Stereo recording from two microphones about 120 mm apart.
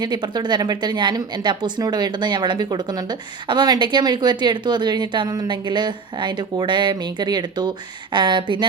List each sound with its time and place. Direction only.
0.0 s a woman's voice: 35° right (ahead or behind)